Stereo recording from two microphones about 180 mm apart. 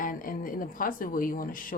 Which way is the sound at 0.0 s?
50° left (ahead or behind).